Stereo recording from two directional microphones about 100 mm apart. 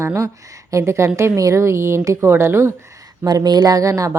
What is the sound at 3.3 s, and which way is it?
Speech, 45° right (ahead or behind).